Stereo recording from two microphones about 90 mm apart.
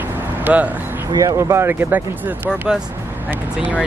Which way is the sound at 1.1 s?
35° right (ahead or behind).